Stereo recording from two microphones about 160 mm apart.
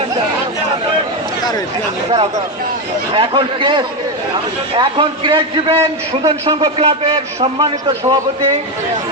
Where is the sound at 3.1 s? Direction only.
30° right (ahead or behind).